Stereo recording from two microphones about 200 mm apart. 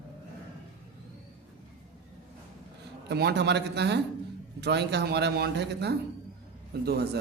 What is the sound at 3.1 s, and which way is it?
A man's voice, 55° right (ahead or behind).